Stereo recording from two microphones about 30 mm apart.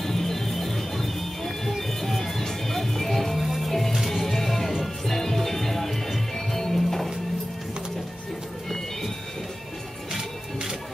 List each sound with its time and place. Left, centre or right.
0.0 s music: centre
3.9 s music: centre
4.2 s music: centre